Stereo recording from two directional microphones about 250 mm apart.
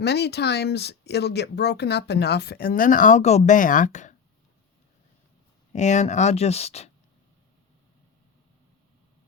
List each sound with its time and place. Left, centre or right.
0.0 s speech: left
5.7 s speech: left